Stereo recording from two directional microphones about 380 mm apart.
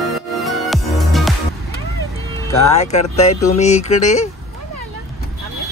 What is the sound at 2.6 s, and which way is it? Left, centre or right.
Speech, centre.